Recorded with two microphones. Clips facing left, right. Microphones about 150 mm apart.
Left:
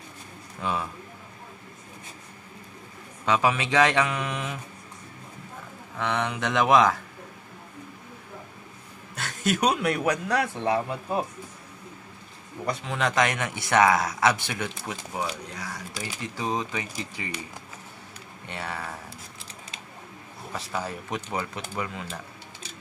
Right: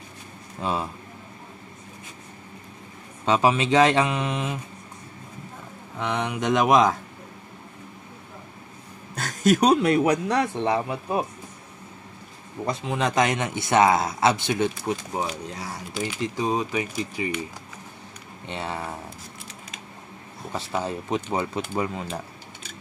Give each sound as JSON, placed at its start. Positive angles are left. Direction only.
{"t": 0.6, "sound": "speech", "side_deg": -30}
{"t": 3.3, "sound": "speech", "side_deg": -25}
{"t": 5.9, "sound": "speech", "side_deg": -15}
{"t": 9.1, "sound": "speech", "side_deg": -40}
{"t": 10.5, "sound": "speech", "side_deg": -20}
{"t": 12.6, "sound": "speech", "side_deg": -20}
{"t": 16.0, "sound": "speech", "side_deg": -20}
{"t": 18.5, "sound": "speech", "side_deg": -25}
{"t": 20.5, "sound": "speech", "side_deg": -25}